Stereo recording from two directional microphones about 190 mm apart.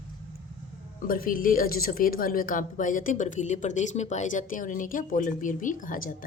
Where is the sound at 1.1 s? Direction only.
50° left (ahead or behind).